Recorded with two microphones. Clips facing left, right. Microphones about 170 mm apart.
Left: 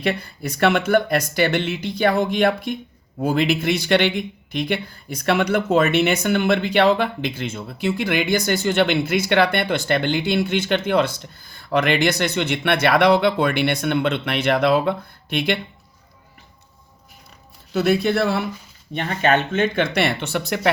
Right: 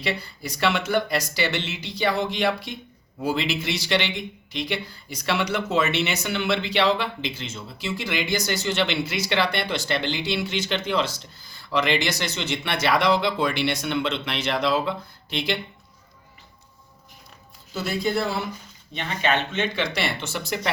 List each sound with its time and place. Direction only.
0.0 s a man's voice: 55° left (ahead or behind)
17.7 s a man's voice: 65° left (ahead or behind)
18.9 s a man's voice: 45° left (ahead or behind)